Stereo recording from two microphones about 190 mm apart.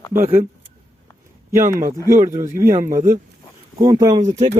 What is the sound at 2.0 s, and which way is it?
Speech, 15° right (ahead or behind).